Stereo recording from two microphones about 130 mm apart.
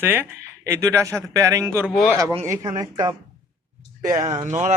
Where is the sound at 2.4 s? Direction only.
25° right (ahead or behind).